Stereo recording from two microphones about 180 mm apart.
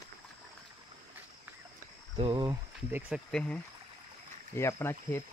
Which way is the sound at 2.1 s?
25° right (ahead or behind).